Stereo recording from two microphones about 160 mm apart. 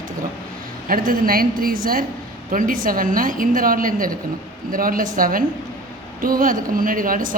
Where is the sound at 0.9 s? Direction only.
60° right (ahead or behind).